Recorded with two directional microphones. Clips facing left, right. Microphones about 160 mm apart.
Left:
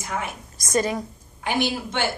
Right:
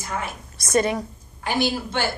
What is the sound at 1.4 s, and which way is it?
Speech, 20° left (ahead or behind).